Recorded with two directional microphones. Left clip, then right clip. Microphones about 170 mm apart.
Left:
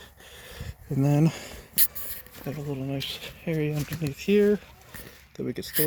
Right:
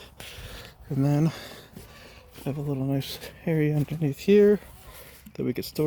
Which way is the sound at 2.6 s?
30° right (ahead or behind).